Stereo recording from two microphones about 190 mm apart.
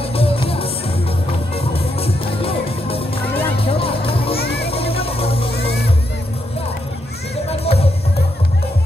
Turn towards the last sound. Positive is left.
turn(degrees=30)  # may be behind; listen again after turning